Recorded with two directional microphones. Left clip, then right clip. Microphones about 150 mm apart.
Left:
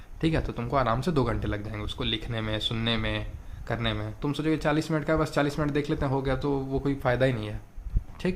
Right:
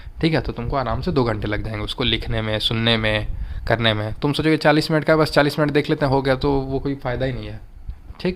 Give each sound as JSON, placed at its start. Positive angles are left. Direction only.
{"t": 0.2, "sound": "speech", "side_deg": -45}
{"t": 0.5, "sound": "speech", "side_deg": -20}
{"t": 1.2, "sound": "speech", "side_deg": -40}
{"t": 6.8, "sound": "speech", "side_deg": -10}
{"t": 8.2, "sound": "speech", "side_deg": -35}